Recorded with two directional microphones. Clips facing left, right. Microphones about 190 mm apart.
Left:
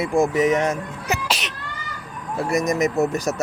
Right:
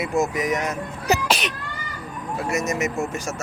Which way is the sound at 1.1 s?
35° right (ahead or behind).